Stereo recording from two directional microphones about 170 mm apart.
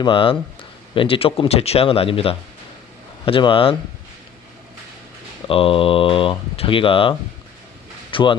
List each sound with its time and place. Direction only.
0.0 s speech: 30° left (ahead or behind)
5.5 s speech: 30° left (ahead or behind)